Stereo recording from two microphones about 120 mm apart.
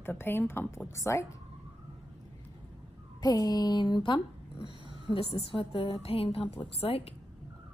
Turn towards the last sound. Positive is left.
turn(degrees=55)  # may be behind; listen again after turning